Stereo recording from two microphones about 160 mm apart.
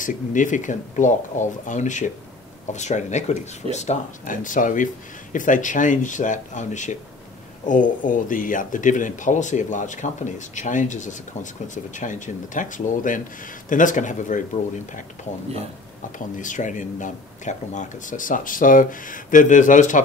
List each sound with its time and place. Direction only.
0.0 s speech: 55° left (ahead or behind)
16.2 s speech: 55° left (ahead or behind)